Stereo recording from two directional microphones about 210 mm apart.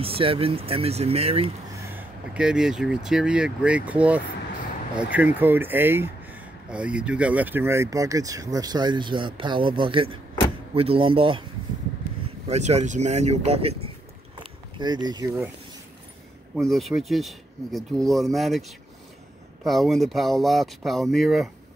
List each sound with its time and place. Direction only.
0.0 s speech: 25° right (ahead or behind)
1.9 s speech: 5° right (ahead or behind); by 11.4 s 25° right (ahead or behind)
12.4 s speech: 30° right (ahead or behind); by 15.5 s 15° right (ahead or behind)
16.5 s speech: centre (ahead or behind)